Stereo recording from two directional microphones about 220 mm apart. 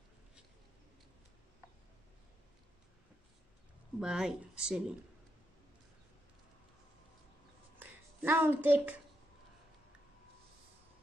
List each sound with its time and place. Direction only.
4.0 s speech: 5° right (ahead or behind)
7.8 s a woman's voice: 10° right (ahead or behind)